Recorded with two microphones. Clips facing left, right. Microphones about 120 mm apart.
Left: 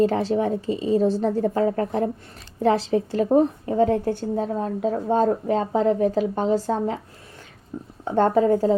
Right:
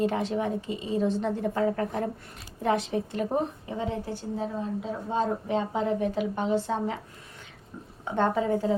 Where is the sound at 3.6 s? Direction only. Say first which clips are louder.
Left 11 dB; 50° left (ahead or behind).